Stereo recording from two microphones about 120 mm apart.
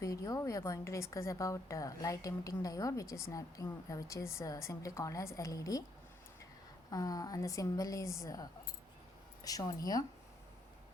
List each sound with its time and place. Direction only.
0.0 s a woman's voice: 30° left (ahead or behind)
6.9 s a woman's voice: 30° left (ahead or behind)